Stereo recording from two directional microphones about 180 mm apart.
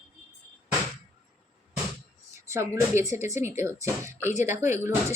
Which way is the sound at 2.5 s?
15° right (ahead or behind).